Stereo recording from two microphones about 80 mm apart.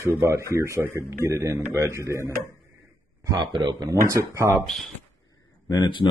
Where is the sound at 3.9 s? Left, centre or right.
Right.